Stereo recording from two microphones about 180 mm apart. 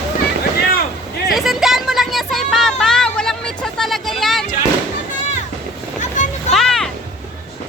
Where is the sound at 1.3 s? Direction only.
Centre (ahead or behind).